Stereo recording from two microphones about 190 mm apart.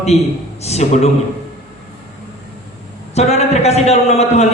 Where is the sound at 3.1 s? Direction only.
35° left (ahead or behind).